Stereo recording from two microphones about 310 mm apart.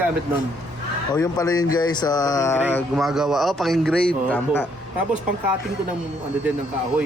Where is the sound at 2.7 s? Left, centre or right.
Centre.